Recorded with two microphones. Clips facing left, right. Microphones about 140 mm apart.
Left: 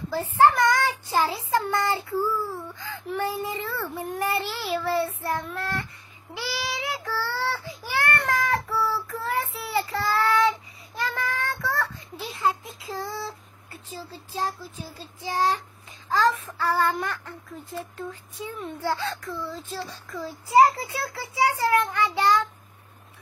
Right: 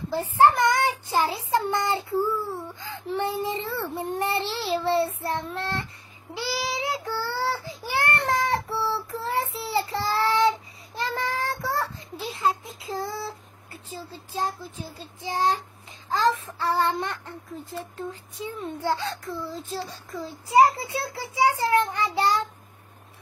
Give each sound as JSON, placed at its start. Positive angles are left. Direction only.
{"t": 0.1, "sound": "speech", "side_deg": -20}
{"t": 6.3, "sound": "child singing", "side_deg": -30}
{"t": 13.2, "sound": "a sound", "side_deg": -25}
{"t": 14.3, "sound": "a child's voice", "side_deg": -25}